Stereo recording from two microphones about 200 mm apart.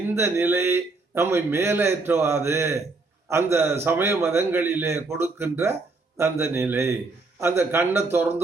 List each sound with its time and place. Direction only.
0.1 s a man's voice: 10° right (ahead or behind)